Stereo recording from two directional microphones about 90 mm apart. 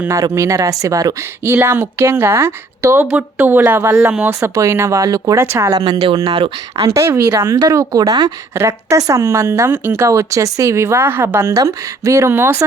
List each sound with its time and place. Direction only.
0.1 s speech: 35° right (ahead or behind)
1.5 s speech: 25° right (ahead or behind)
5.8 s speech: 70° right (ahead or behind); by 6.8 s 90° right
6.9 s speech: 30° right (ahead or behind)
8.5 s speech: 35° right (ahead or behind)
12.3 s speech: 25° right (ahead or behind)